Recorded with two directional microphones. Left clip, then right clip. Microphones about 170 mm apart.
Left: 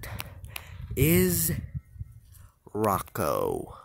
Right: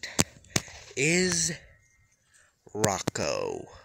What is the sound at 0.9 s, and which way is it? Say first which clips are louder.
Speech: even; 20° left (ahead or behind).